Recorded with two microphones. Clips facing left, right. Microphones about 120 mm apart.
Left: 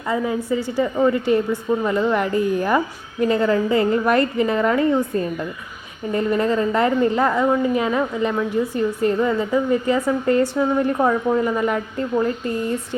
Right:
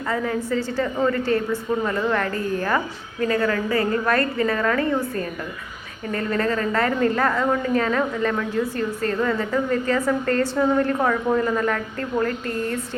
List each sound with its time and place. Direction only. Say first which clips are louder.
0.1 s a woman's voice: left 3 dB; 15° left (ahead or behind)